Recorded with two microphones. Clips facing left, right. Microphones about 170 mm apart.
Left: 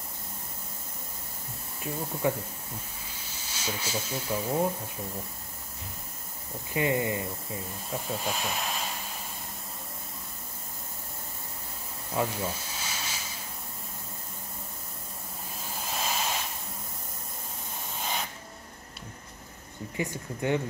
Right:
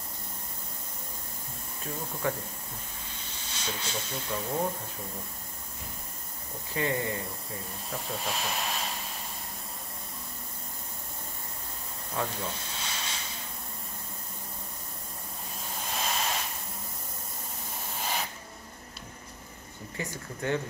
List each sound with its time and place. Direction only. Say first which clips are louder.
1.8 s speech: left 3 dB; 10° left (ahead or behind)
3.4 s speech: left 2 dB; 5° left (ahead or behind)
6.7 s speech: left 3 dB; 15° left (ahead or behind)
7.9 s speech: left 2 dB; centre (ahead or behind)
12.2 s a sound: left 4 dB; 5° left (ahead or behind)
15.7 s hiss: left 1 dB; centre (ahead or behind)
20.0 s speech: left 4 dB; 15° left (ahead or behind)